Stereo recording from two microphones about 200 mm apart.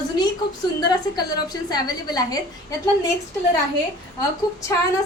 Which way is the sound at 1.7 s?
20° left (ahead or behind).